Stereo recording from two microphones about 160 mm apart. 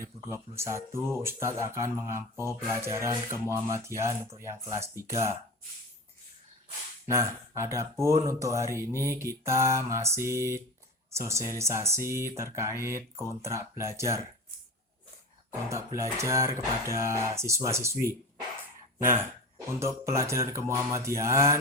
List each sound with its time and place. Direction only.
0.0 s speech: 15° right (ahead or behind)
7.1 s speech: 15° right (ahead or behind)
15.7 s speech: 20° right (ahead or behind)